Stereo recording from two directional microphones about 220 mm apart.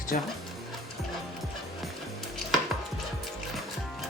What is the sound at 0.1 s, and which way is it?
Speech, 35° left (ahead or behind).